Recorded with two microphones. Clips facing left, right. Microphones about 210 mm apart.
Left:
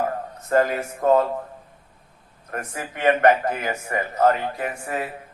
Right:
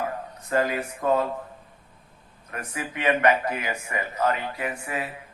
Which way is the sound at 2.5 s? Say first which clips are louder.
Left 2 dB; 50° left (ahead or behind).